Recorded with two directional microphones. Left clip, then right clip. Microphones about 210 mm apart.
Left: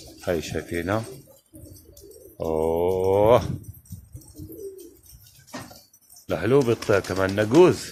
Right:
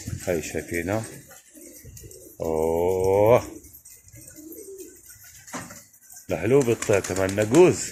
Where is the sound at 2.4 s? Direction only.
10° left (ahead or behind).